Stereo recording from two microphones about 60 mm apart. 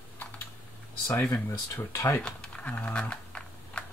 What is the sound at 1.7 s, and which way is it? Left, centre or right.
Speech, left.